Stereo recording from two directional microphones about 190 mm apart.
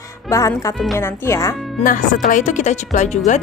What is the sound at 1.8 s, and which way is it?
Speech, 45° left (ahead or behind).